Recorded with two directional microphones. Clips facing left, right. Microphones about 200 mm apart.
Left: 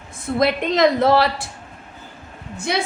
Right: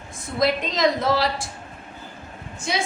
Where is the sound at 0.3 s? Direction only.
60° left (ahead or behind).